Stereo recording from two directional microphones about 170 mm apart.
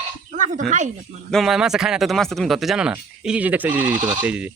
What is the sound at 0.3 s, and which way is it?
Dog, 45° right (ahead or behind).